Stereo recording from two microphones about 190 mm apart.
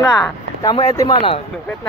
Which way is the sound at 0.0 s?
20° left (ahead or behind).